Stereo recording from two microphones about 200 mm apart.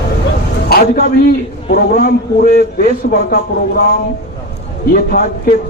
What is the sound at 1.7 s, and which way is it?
A man's voice, 50° left (ahead or behind).